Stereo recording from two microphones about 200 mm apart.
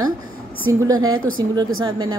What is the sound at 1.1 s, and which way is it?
Speech, 90° right.